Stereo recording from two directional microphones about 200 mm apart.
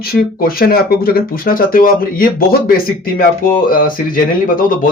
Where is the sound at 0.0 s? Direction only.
45° left (ahead or behind).